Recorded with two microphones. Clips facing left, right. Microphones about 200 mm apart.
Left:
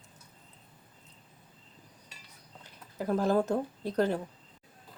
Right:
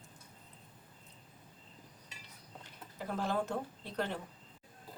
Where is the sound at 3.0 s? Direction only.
40° left (ahead or behind).